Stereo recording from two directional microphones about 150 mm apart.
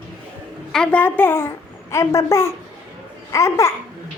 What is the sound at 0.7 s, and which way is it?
A woman's voice, 5° left (ahead or behind).